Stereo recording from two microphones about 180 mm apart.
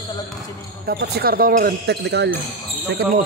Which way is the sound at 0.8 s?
65° right (ahead or behind).